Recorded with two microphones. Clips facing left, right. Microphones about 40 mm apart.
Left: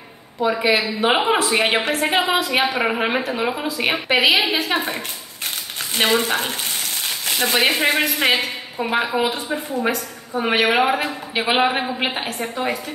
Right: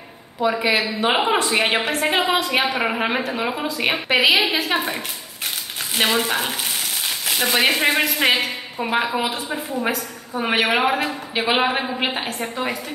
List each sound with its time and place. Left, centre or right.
0.4 s a woman's voice: centre